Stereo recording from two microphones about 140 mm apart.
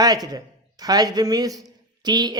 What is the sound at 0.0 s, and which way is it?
A man's voice, 30° right (ahead or behind).